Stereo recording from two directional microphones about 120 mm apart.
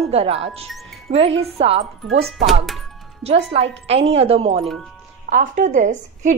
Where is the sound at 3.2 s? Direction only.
55° right (ahead or behind).